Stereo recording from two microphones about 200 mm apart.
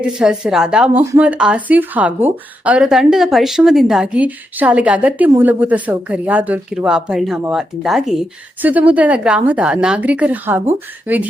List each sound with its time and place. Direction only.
0.0 s a woman's voice: 5° right (ahead or behind)